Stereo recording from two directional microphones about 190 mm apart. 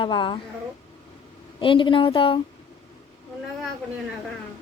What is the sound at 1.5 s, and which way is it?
Speech, 25° left (ahead or behind).